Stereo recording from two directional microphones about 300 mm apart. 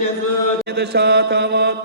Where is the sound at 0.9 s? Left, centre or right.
Right.